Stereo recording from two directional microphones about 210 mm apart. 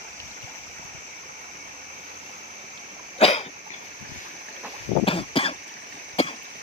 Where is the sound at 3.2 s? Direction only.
30° left (ahead or behind).